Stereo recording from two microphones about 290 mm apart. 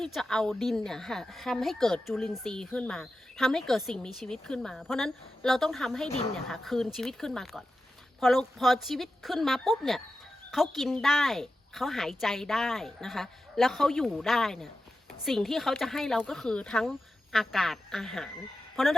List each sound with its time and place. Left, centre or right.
0.0 s a woman's voice: centre